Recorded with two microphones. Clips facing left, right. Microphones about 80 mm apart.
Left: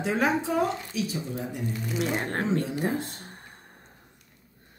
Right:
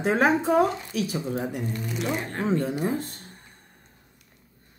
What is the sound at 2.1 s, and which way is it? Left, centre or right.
Speech, left.